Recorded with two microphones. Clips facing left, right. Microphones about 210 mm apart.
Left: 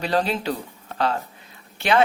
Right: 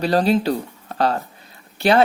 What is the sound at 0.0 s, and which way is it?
Speech, 35° right (ahead or behind).